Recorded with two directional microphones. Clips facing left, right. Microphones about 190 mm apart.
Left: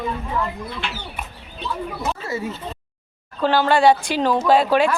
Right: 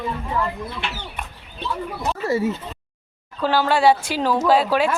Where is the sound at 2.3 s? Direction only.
30° right (ahead or behind).